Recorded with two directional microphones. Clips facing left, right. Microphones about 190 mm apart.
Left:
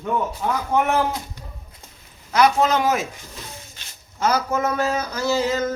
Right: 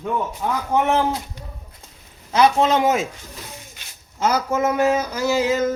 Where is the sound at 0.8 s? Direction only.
25° right (ahead or behind).